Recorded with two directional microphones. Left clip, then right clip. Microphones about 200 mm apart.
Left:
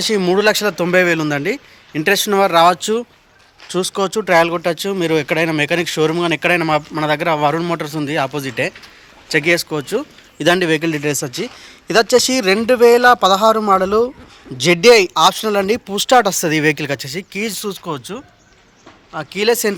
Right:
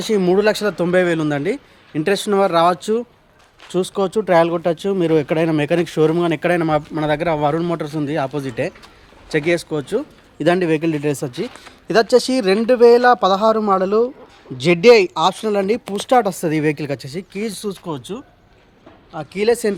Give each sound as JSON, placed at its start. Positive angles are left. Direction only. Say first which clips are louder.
{"t": 0.0, "sound": "speech", "louder": "left 1 dB", "side_deg": -10}
{"t": 10.3, "sound": "speech", "louder": "left 2 dB", "side_deg": -5}